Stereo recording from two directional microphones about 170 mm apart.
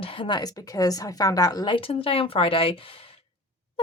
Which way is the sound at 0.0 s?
30° left (ahead or behind).